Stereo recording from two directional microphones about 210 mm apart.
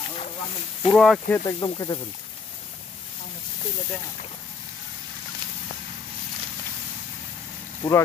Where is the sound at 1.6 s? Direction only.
20° left (ahead or behind).